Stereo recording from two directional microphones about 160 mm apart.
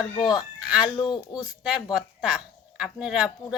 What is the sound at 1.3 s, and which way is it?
Speech, 25° left (ahead or behind).